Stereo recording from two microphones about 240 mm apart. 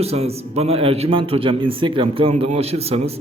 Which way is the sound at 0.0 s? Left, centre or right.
Right.